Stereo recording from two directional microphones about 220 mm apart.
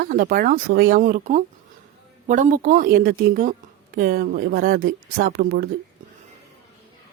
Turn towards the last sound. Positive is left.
turn(degrees=-45)  # may be behind; listen again after turning